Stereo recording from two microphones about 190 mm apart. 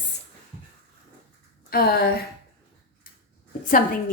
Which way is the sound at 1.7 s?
55° left (ahead or behind).